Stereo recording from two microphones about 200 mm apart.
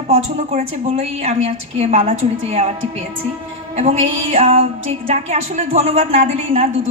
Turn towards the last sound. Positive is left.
turn(degrees=-30)  # may be behind; listen again after turning